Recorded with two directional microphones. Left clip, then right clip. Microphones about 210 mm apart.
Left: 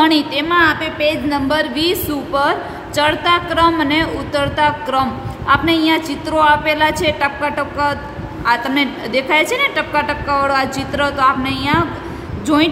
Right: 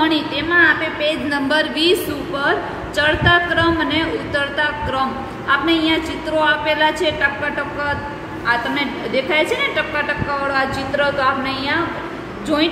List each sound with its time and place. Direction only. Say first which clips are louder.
0.0 s a woman's voice: left 4 dB; 45° left (ahead or behind)
3.0 s a woman's voice: even; 40° left (ahead or behind)